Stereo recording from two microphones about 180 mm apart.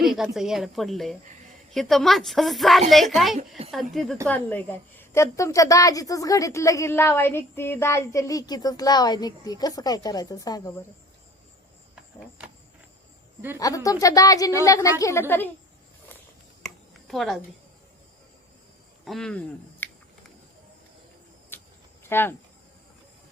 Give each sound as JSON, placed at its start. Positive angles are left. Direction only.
{"t": 0.0, "sound": "a woman's voice", "side_deg": 0}
{"t": 13.6, "sound": "a woman's voice", "side_deg": 20}
{"t": 16.6, "sound": "a sound", "side_deg": 0}
{"t": 19.0, "sound": "speech", "side_deg": 5}
{"t": 21.5, "sound": "cricket", "side_deg": 10}
{"t": 22.1, "sound": "a woman's voice", "side_deg": 10}